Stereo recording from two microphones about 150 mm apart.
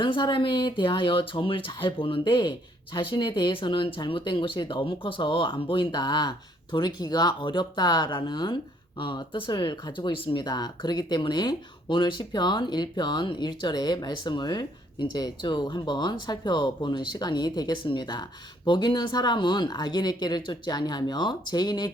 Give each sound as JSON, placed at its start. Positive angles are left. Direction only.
{"t": 0.0, "sound": "speech", "side_deg": 30}